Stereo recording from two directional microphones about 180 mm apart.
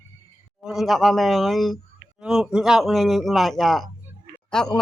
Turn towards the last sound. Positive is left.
turn(degrees=5)  # may be behind; listen again after turning